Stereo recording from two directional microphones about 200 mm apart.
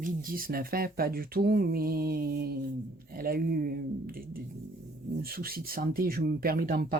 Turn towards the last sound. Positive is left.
turn(degrees=-50)  # may be behind; listen again after turning